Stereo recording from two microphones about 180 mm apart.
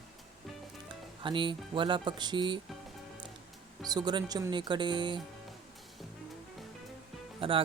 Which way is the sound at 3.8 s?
25° right (ahead or behind).